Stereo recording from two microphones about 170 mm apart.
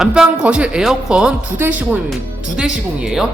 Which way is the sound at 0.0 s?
5° right (ahead or behind).